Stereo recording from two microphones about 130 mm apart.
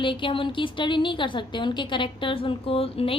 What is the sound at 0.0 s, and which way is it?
A woman's voice, 40° left (ahead or behind).